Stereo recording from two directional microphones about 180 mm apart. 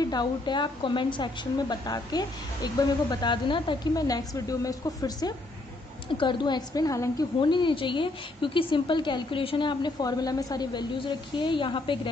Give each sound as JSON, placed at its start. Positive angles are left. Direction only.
{"t": 0.0, "sound": "a woman's voice", "side_deg": 20}